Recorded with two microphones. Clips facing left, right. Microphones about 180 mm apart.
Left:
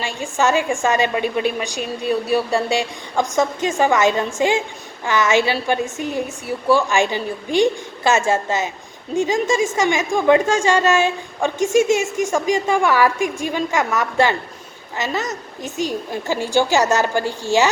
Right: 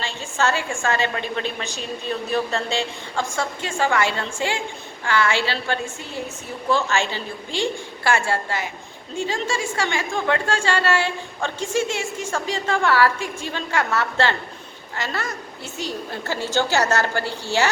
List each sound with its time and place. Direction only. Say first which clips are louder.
0.0 s a woman's voice: left 4 dB; 15° left (ahead or behind)